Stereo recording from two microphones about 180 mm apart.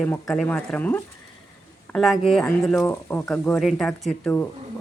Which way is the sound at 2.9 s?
10° left (ahead or behind).